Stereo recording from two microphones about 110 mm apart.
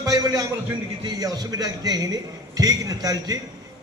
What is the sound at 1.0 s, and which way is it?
A man's voice, 35° right (ahead or behind).